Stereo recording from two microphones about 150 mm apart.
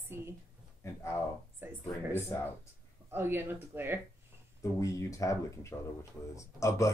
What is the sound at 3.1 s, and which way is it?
Speech, 15° right (ahead or behind).